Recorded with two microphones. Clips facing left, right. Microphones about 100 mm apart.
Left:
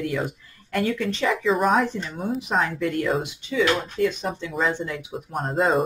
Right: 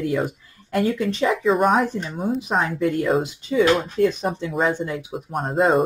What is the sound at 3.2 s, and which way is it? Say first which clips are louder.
Speech: right 4 dB; 40° right (ahead or behind).